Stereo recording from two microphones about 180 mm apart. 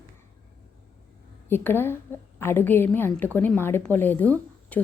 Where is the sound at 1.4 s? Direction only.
10° left (ahead or behind).